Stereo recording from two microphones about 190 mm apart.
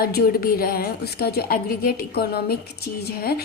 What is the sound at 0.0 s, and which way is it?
A woman's voice, 55° left (ahead or behind).